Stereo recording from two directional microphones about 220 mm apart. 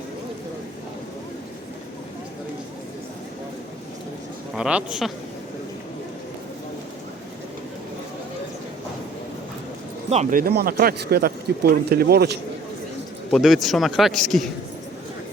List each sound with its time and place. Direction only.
4.5 s a man's voice: 5° right (ahead or behind)
10.1 s speech: 35° right (ahead or behind)
13.3 s a man's voice: centre (ahead or behind)